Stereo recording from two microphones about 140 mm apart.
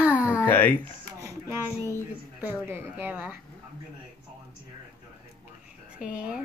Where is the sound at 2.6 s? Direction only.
15° right (ahead or behind).